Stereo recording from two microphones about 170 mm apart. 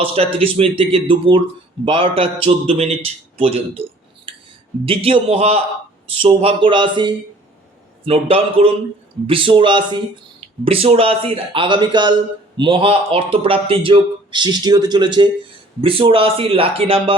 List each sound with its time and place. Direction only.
0.0 s a man's voice: 35° right (ahead or behind)
4.9 s a man's voice: 35° right (ahead or behind)